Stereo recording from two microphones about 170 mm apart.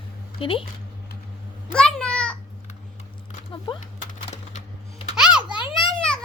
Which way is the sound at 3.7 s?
30° left (ahead or behind).